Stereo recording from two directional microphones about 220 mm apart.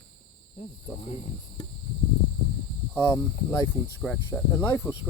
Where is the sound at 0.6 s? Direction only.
30° left (ahead or behind).